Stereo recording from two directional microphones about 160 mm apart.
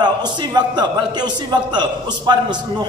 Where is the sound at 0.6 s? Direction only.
25° right (ahead or behind).